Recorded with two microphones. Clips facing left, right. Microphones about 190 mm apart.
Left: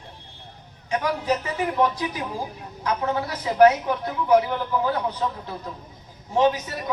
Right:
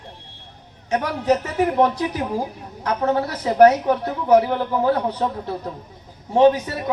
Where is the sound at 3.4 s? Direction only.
40° right (ahead or behind).